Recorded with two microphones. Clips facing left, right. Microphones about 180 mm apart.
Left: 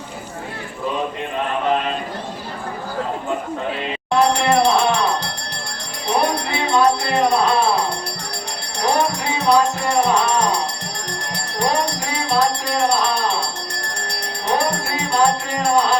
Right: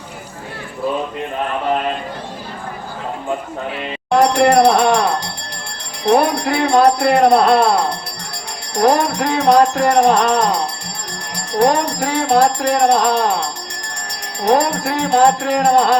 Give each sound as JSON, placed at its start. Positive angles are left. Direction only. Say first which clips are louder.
{"t": 4.1, "sound": "music", "louder": "right 4 dB", "side_deg": -65}
{"t": 6.1, "sound": "music", "louder": "right 6 dB", "side_deg": -60}
{"t": 8.8, "sound": "speech", "louder": "right 5 dB", "side_deg": -60}
{"t": 11.6, "sound": "speech", "louder": "right 6 dB", "side_deg": -75}
{"t": 14.4, "sound": "speech", "louder": "right 6 dB", "side_deg": -80}